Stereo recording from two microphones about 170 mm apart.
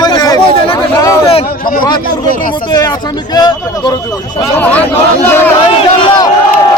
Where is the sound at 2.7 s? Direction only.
25° left (ahead or behind).